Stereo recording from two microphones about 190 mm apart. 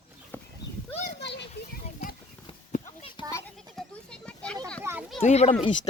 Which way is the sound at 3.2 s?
25° left (ahead or behind).